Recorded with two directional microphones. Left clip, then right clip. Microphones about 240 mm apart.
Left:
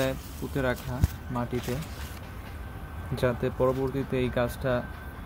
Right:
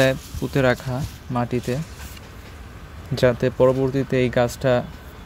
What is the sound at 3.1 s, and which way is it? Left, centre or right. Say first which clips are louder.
Speech: right 9 dB; right.